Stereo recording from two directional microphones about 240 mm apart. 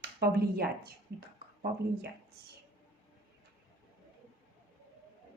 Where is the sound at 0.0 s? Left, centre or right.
Right.